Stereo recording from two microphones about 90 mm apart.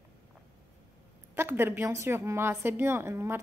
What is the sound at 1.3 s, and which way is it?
Speech, 25° right (ahead or behind).